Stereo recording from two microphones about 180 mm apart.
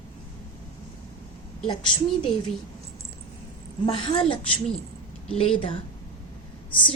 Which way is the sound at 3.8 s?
30° left (ahead or behind).